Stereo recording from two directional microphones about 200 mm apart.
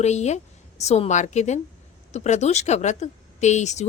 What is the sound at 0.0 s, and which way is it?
A woman's voice, 35° left (ahead or behind).